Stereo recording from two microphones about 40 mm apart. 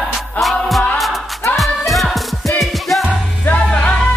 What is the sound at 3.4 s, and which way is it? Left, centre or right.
Music, left.